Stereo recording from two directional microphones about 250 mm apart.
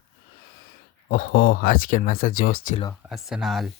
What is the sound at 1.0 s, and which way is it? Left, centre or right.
Speech, left.